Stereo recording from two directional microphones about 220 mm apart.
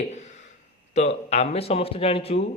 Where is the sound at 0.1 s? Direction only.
30° left (ahead or behind).